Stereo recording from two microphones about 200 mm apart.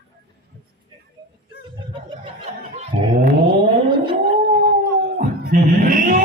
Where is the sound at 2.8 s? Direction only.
45° right (ahead or behind).